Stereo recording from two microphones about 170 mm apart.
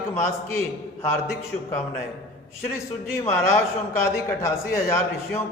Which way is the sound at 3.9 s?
15° left (ahead or behind).